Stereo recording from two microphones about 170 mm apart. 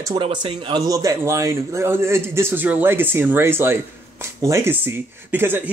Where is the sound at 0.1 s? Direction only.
25° right (ahead or behind).